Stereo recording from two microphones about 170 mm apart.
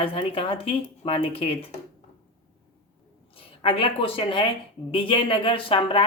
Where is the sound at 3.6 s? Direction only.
30° left (ahead or behind).